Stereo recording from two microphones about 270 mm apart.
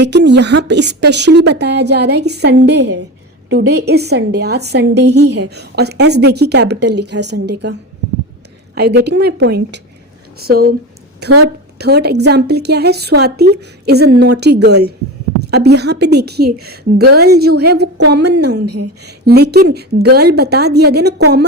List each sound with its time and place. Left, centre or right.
0.0 s a woman's voice: right
18.6 s speech: right
19.0 s a woman's voice: right